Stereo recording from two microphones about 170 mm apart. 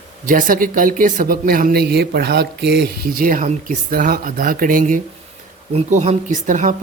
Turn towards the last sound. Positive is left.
turn(degrees=-45)  # may be behind; listen again after turning